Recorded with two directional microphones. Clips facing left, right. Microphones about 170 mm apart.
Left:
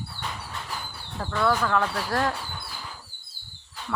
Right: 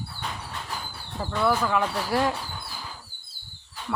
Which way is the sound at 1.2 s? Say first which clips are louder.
Even; 10° right (ahead or behind).